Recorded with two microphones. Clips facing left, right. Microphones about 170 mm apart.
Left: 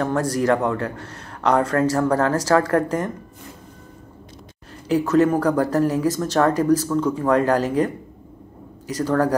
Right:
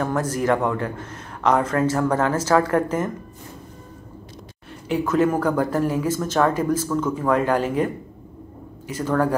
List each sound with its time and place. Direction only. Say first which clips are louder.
0.0 s speech: left 2 dB; 35° left (ahead or behind)
4.8 s speech: left 3 dB; 35° left (ahead or behind)